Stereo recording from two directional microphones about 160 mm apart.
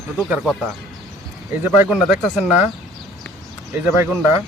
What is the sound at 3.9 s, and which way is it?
Speech, 15° right (ahead or behind).